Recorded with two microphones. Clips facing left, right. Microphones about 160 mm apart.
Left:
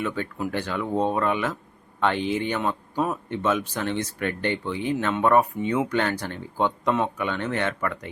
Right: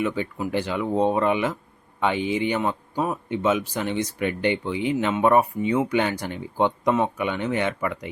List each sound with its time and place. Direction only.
0.0 s speech: 10° right (ahead or behind)